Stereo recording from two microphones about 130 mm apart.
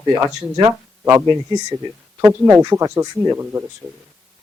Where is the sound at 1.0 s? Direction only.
20° right (ahead or behind).